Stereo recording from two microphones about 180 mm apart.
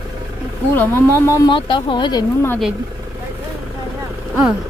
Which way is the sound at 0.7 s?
10° left (ahead or behind).